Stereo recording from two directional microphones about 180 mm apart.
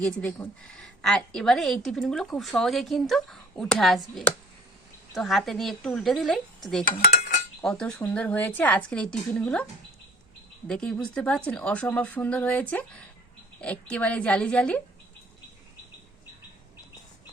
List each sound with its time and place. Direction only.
0.0 s a woman's voice: 5° left (ahead or behind)
10.7 s speech: 5° left (ahead or behind)